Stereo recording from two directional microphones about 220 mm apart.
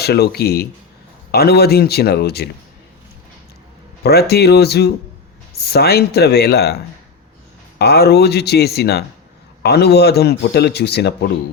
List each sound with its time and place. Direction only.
0.0 s speech: 45° left (ahead or behind)
4.0 s speech: 45° left (ahead or behind)